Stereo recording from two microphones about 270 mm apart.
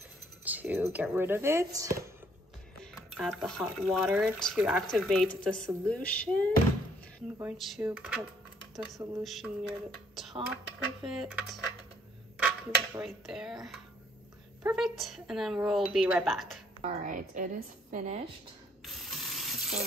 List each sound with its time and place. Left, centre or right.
0.5 s a sound: centre
0.9 s speech: centre
2.8 s speech: centre
7.3 s speech: centre
16.8 s speech: right
18.9 s water tap: centre